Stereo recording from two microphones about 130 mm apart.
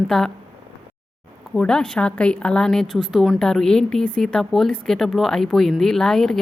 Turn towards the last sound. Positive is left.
turn(degrees=5)  # may be behind; listen again after turning